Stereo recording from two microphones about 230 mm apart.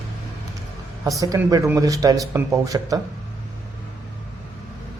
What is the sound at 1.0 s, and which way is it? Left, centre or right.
A man's voice, centre.